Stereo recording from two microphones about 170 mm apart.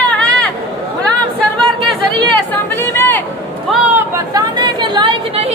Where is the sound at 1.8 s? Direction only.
10° left (ahead or behind).